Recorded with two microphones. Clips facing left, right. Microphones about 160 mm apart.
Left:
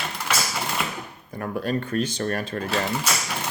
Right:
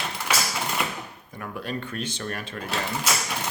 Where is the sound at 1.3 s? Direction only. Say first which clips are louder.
Left 6 dB; 40° left (ahead or behind).